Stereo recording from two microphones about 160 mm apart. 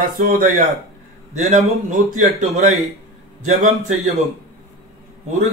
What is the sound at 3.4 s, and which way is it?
Speech, 45° right (ahead or behind).